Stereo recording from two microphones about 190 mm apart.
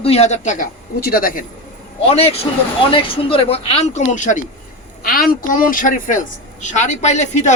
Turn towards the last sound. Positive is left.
turn(degrees=35)  # may be behind; listen again after turning